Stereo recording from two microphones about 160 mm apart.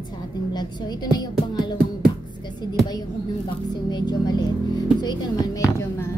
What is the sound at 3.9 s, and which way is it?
Speech, 25° left (ahead or behind).